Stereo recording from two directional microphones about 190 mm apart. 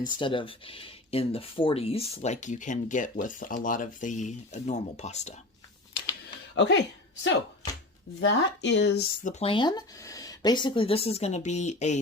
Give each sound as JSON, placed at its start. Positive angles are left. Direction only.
{"t": 0.0, "sound": "speech", "side_deg": 25}
{"t": 6.5, "sound": "speech", "side_deg": 70}
{"t": 8.2, "sound": "speech", "side_deg": 65}
{"t": 9.2, "sound": "speech", "side_deg": 35}